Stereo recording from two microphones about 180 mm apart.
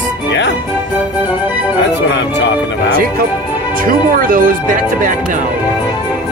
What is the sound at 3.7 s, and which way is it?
Speech, 50° right (ahead or behind).